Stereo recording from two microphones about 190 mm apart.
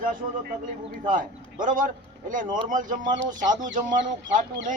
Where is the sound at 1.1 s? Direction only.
45° right (ahead or behind).